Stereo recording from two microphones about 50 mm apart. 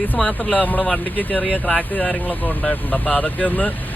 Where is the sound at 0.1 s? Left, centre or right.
Left.